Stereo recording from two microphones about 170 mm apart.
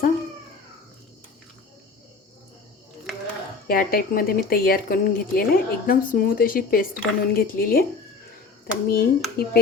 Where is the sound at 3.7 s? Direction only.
60° left (ahead or behind).